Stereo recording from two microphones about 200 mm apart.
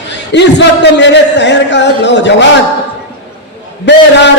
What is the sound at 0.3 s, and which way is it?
A man's voice, 60° left (ahead or behind).